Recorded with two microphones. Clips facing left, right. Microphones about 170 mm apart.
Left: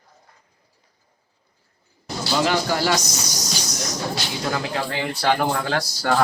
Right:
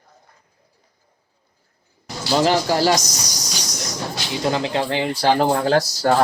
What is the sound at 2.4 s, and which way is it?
Speech, 35° right (ahead or behind).